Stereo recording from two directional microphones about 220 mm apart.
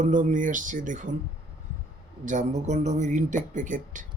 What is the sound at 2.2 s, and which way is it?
Speech, 35° right (ahead or behind).